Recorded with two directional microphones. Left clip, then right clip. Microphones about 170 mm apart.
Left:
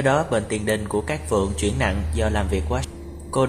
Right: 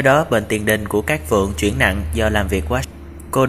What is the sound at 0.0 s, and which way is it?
Speech, 20° right (ahead or behind).